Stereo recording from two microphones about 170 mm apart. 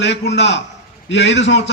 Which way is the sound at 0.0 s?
90° left.